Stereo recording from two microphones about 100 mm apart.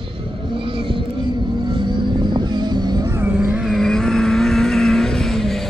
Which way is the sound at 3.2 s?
20° right (ahead or behind).